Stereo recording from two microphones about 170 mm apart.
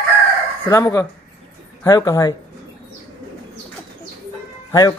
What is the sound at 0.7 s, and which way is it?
Speech, 20° left (ahead or behind).